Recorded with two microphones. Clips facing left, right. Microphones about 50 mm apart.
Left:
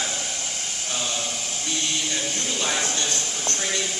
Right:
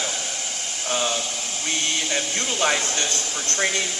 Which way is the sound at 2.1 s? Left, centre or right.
Right.